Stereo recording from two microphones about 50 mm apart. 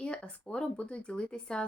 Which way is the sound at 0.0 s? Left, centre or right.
Left.